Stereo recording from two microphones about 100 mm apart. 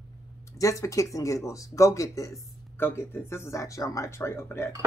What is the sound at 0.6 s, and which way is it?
Speech, 30° left (ahead or behind).